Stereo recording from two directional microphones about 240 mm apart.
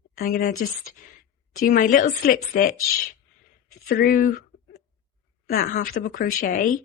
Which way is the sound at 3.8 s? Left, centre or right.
Left.